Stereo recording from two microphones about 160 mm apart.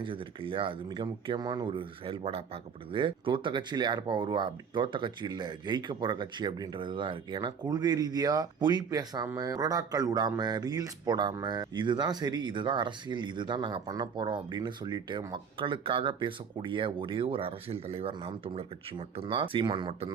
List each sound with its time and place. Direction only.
0.0 s speech: 30° right (ahead or behind)